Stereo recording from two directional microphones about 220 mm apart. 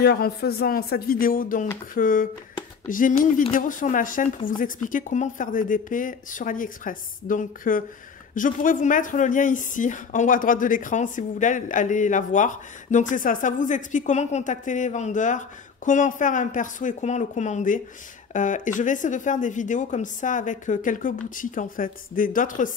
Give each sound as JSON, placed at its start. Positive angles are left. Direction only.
{"t": 0.0, "sound": "a woman's voice", "side_deg": 45}